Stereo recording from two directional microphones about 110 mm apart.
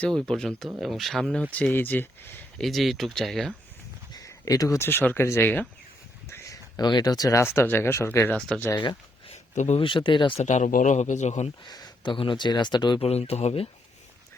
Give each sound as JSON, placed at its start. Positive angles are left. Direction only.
{"t": 0.0, "sound": "speech", "side_deg": 5}
{"t": 2.6, "sound": "speech", "side_deg": 0}
{"t": 4.2, "sound": "a sound", "side_deg": 35}
{"t": 4.9, "sound": "speech", "side_deg": 20}
{"t": 6.2, "sound": "a sound", "side_deg": 25}
{"t": 7.5, "sound": "speech", "side_deg": 20}
{"t": 8.3, "sound": "speech", "side_deg": 5}
{"t": 8.7, "sound": "speech", "side_deg": 45}
{"t": 9.3, "sound": "a sound", "side_deg": 80}
{"t": 9.8, "sound": "speech", "side_deg": 50}
{"t": 10.4, "sound": "a man's voice", "side_deg": 90}
{"t": 11.6, "sound": "speech", "side_deg": 40}
{"t": 13.0, "sound": "speech", "side_deg": 65}